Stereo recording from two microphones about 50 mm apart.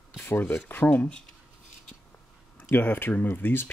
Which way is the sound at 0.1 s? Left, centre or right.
Left.